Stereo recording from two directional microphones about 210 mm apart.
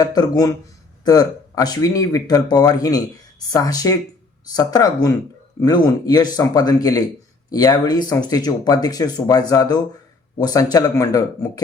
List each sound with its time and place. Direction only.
0.0 s speech: 20° left (ahead or behind)